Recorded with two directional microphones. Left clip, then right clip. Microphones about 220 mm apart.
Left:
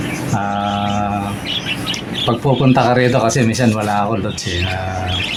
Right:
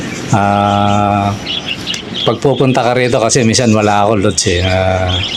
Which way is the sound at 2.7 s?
35° right (ahead or behind).